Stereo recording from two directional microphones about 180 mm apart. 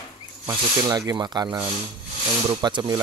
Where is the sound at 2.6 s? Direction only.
25° right (ahead or behind).